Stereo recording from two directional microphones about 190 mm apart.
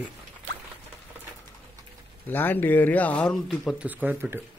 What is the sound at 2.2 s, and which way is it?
Speech, 10° left (ahead or behind).